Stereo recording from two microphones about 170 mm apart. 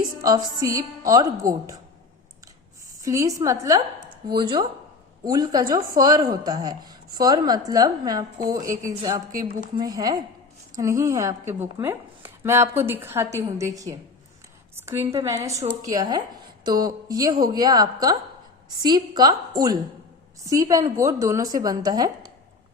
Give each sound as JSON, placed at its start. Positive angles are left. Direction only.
{"t": 0.2, "sound": "a woman's voice", "side_deg": -20}
{"t": 3.0, "sound": "a woman's voice", "side_deg": -20}